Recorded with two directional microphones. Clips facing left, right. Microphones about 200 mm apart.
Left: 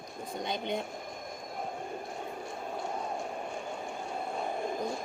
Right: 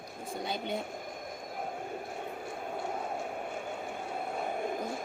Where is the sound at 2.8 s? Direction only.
60° right (ahead or behind).